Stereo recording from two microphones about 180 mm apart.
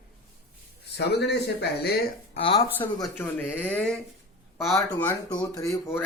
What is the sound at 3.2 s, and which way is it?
Speech, 10° left (ahead or behind).